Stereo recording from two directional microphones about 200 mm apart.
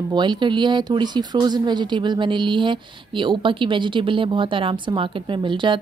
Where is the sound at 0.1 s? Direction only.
20° right (ahead or behind).